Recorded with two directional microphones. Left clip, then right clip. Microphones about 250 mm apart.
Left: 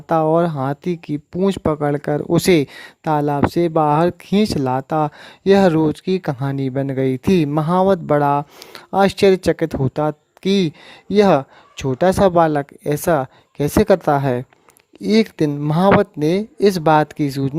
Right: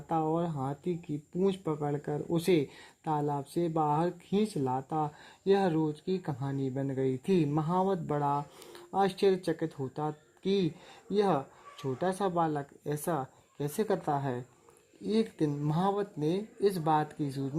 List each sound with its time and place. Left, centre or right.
0.1 s speech: left